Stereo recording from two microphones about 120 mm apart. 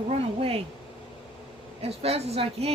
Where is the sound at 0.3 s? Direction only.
55° right (ahead or behind).